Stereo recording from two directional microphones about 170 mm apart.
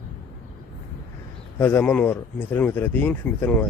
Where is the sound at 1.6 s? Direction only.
10° left (ahead or behind).